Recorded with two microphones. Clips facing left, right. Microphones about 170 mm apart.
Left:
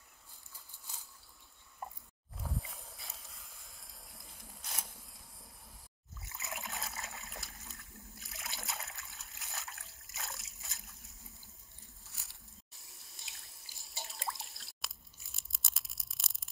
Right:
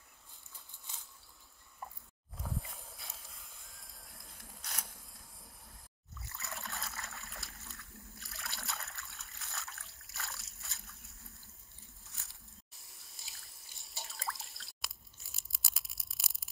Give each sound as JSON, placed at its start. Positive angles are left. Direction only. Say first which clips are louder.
{"t": 2.3, "sound": "a sound", "louder": "even", "side_deg": 0}
{"t": 6.1, "sound": "trickle", "louder": "left 1 dB", "side_deg": 20}
{"t": 7.2, "sound": "splash", "louder": "left 2 dB", "side_deg": 0}
{"t": 7.6, "sound": "a sound", "louder": "even", "side_deg": 0}
{"t": 8.5, "sound": "water", "louder": "left 1 dB", "side_deg": 0}
{"t": 9.8, "sound": "splash", "louder": "left 1 dB", "side_deg": 0}
{"t": 12.0, "sound": "water", "louder": "right 1 dB", "side_deg": 0}